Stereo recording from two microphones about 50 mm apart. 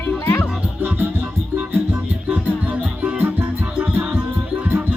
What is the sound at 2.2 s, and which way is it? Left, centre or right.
Music, right.